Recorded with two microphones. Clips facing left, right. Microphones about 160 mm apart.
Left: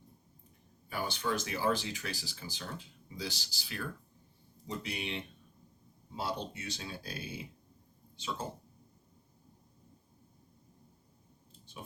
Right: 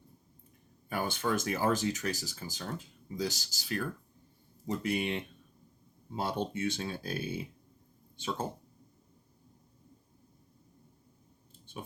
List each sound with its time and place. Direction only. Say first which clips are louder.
0.9 s speech: right 3 dB; 50° right (ahead or behind)